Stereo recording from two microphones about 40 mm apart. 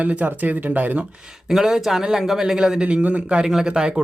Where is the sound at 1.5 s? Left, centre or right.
Centre.